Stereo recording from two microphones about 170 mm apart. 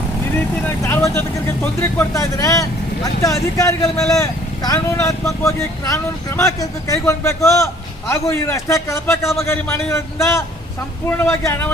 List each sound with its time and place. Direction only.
0.6 s speech: 15° left (ahead or behind)